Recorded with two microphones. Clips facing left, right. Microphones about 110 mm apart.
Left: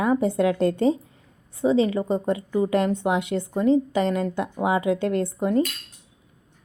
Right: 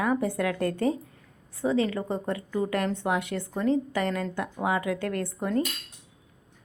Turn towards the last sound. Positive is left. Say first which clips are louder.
# left 6 dB
turn(degrees=20)  # may be behind; listen again after turning